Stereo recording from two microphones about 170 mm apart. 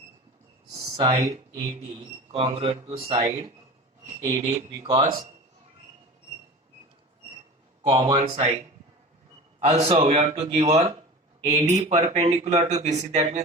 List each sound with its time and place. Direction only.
0.9 s speech: 25° right (ahead or behind)
4.2 s speech: 20° right (ahead or behind)
4.5 s speech: 35° right (ahead or behind)
7.9 s speech: 30° right (ahead or behind)
9.6 s speech: 40° right (ahead or behind)